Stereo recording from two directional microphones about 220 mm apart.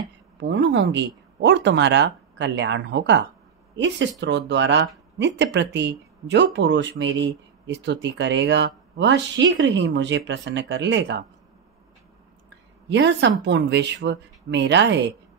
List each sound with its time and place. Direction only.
0.4 s speech: 55° right (ahead or behind)
12.9 s speech: 50° right (ahead or behind)